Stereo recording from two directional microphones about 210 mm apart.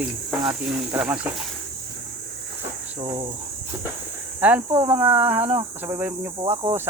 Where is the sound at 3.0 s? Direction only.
25° right (ahead or behind).